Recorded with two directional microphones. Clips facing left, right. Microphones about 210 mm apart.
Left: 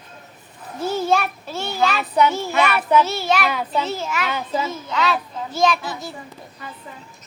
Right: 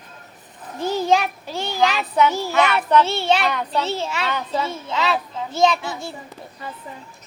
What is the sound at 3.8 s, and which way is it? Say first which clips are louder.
Speech: even; 30° right (ahead or behind).